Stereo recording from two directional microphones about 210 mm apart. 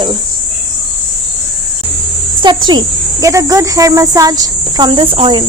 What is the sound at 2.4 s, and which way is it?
Speech, 20° right (ahead or behind).